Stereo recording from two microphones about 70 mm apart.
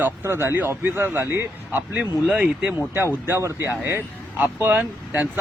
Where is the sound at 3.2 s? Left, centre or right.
Right.